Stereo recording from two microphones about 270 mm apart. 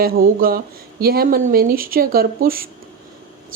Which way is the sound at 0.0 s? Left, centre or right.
Right.